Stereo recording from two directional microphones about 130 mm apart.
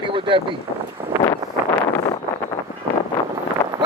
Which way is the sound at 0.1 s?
40° right (ahead or behind).